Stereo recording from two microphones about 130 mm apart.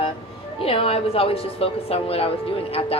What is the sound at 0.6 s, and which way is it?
A woman's voice, 50° left (ahead or behind).